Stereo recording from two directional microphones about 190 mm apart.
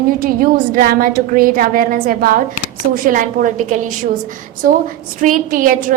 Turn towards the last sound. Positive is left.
turn(degrees=-45)  # may be behind; listen again after turning